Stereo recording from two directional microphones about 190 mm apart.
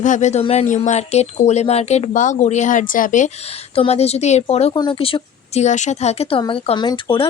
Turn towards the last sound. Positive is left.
turn(degrees=25)  # may be behind; listen again after turning